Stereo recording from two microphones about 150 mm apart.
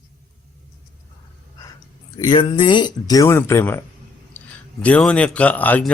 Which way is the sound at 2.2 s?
35° left (ahead or behind).